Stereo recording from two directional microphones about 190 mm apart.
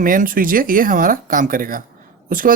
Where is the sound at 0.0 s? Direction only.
45° right (ahead or behind).